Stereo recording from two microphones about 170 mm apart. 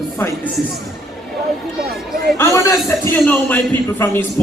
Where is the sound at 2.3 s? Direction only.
15° left (ahead or behind).